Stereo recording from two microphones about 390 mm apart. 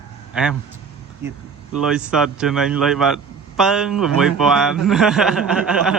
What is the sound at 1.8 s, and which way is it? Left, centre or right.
A man's voice, centre.